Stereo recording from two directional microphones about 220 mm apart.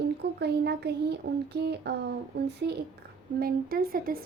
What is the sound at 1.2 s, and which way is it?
A woman's voice, 50° right (ahead or behind).